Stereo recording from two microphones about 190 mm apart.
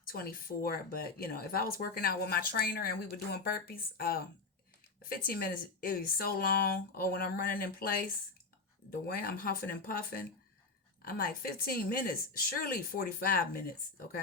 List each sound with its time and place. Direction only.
0.1 s speech: 50° left (ahead or behind)